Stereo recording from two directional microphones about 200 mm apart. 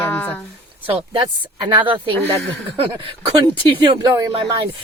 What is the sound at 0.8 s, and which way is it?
Speech, 25° right (ahead or behind).